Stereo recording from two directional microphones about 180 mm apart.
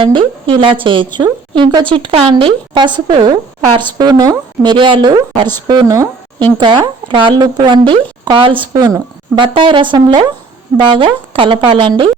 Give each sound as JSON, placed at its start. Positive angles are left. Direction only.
{"t": 0.0, "sound": "a woman's voice", "side_deg": -30}